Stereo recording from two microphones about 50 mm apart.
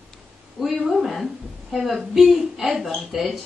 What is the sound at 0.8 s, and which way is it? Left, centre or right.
A woman's voice, centre.